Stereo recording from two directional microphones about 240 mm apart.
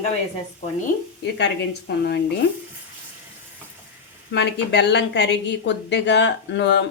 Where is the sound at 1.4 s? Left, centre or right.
Left.